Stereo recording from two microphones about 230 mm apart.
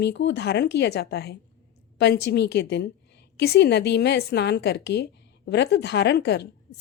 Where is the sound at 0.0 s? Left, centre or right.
Left.